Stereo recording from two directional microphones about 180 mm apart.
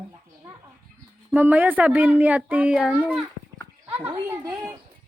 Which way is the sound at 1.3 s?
10° right (ahead or behind).